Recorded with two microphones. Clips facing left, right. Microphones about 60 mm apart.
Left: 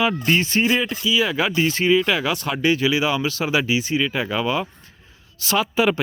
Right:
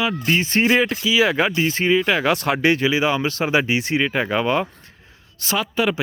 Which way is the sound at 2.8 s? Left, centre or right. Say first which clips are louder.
Right 1 dB; right.